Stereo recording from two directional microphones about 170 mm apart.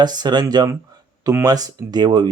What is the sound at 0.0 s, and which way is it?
Speech, 25° right (ahead or behind).